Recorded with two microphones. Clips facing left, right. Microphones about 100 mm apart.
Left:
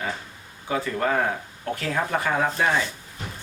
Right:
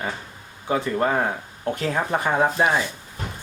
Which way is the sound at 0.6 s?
25° right (ahead or behind).